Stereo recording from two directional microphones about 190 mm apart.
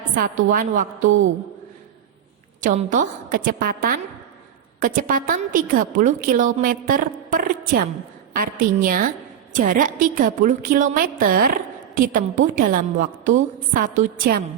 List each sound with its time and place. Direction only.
0.2 s a woman's voice: 45° right (ahead or behind)
2.6 s a woman's voice: 40° right (ahead or behind)